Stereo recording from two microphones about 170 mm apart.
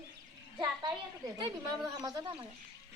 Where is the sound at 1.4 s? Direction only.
25° right (ahead or behind).